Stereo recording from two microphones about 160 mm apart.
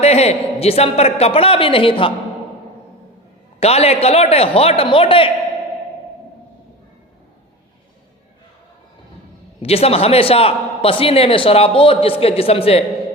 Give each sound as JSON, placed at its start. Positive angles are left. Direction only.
{"t": 0.0, "sound": "a man's voice", "side_deg": 40}
{"t": 3.6, "sound": "a man's voice", "side_deg": 40}
{"t": 9.6, "sound": "a man's voice", "side_deg": 40}